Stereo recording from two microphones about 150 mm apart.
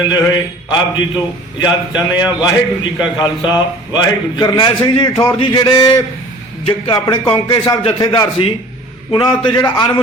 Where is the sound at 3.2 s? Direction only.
30° left (ahead or behind).